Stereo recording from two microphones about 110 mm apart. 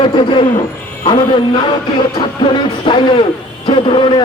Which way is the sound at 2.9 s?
50° left (ahead or behind).